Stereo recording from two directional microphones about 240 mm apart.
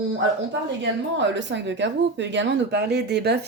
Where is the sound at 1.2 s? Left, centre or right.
Right.